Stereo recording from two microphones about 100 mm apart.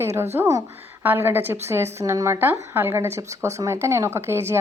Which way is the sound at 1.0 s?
20° right (ahead or behind).